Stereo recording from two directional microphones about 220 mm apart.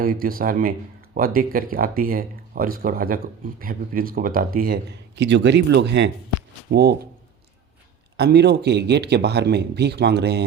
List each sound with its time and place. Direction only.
0.0 s speech: 40° right (ahead or behind)
8.1 s speech: 50° right (ahead or behind)